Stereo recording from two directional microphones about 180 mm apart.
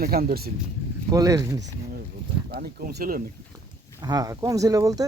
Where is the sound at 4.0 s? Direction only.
20° right (ahead or behind).